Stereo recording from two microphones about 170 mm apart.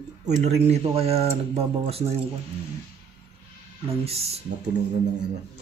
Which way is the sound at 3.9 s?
35° right (ahead or behind).